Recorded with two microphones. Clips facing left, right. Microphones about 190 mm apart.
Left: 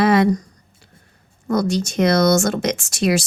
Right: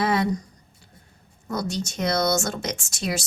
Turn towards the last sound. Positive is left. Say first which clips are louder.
# left 10 dB
turn(degrees=85)